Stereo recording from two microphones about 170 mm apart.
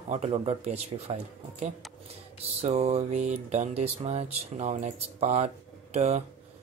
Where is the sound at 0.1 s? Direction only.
40° right (ahead or behind).